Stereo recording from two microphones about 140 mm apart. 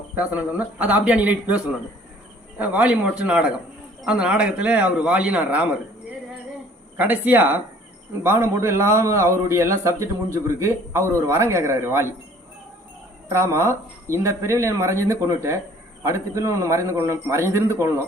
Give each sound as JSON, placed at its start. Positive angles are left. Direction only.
{"t": 0.2, "sound": "a man's voice", "side_deg": -10}
{"t": 6.9, "sound": "a man's voice", "side_deg": -15}
{"t": 13.2, "sound": "a man's voice", "side_deg": -20}